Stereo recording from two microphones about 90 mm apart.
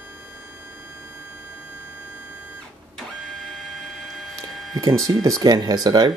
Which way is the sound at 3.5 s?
Centre (ahead or behind).